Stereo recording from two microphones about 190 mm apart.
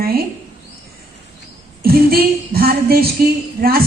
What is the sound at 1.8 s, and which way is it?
Speech, 55° right (ahead or behind).